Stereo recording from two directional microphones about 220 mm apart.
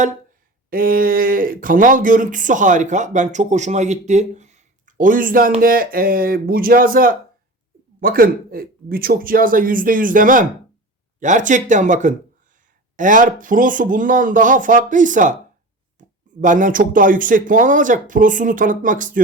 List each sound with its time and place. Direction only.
0.7 s speech: 40° right (ahead or behind)